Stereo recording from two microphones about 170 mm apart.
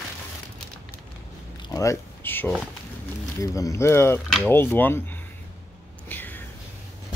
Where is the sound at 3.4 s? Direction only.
20° left (ahead or behind).